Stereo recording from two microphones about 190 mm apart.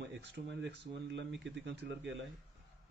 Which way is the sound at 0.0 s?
65° right (ahead or behind).